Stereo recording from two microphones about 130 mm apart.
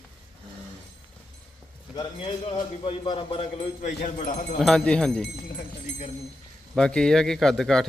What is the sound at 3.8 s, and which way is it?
Speech, 80° left.